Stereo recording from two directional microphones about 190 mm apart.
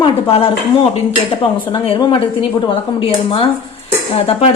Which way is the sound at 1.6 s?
25° left (ahead or behind).